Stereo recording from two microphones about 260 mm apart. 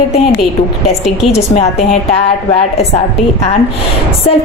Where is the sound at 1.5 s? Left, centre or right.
Left.